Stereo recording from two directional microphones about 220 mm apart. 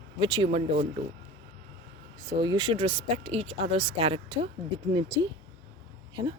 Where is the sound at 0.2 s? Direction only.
20° right (ahead or behind).